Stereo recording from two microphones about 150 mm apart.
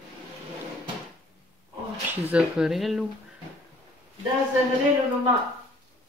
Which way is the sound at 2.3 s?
5° right (ahead or behind).